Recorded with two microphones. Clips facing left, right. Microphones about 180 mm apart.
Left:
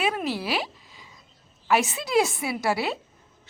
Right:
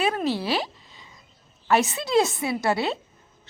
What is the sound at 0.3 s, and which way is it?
Speech, 30° right (ahead or behind).